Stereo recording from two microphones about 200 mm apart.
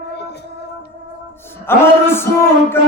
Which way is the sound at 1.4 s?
10° left (ahead or behind).